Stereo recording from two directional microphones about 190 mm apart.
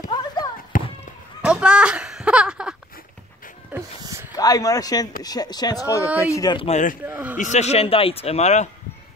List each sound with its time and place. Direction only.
0.1 s basketball bounce: 20° left (ahead or behind)
0.7 s a sound: 45° left (ahead or behind)
1.4 s a sound: 5° right (ahead or behind)
3.7 s music: 15° right (ahead or behind)
4.4 s speech: 20° left (ahead or behind)
7.1 s a man's voice: 10° right (ahead or behind)
7.3 s speech: 40° left (ahead or behind)